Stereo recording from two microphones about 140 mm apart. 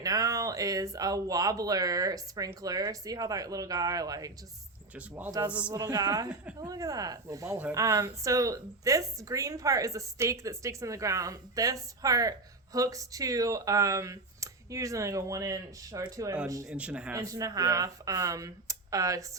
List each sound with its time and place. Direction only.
0.0 s speech: 25° right (ahead or behind)
4.9 s a man's voice: 10° right (ahead or behind)
5.7 s speech: 30° right (ahead or behind)
16.6 s a man's voice: 10° right (ahead or behind)
17.2 s speech: 25° right (ahead or behind)